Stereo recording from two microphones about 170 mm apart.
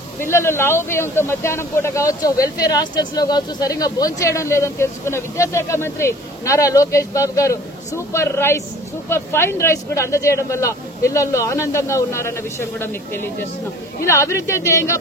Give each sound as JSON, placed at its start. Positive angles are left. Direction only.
{"t": 0.2, "sound": "speech", "side_deg": 15}